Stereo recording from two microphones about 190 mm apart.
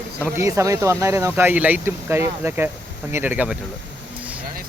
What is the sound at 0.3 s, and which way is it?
Speech, 15° right (ahead or behind).